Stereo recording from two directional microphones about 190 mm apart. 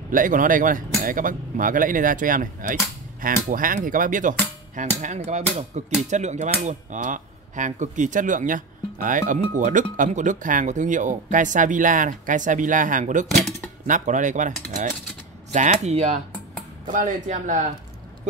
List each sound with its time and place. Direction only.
0.1 s speech: 45° right (ahead or behind)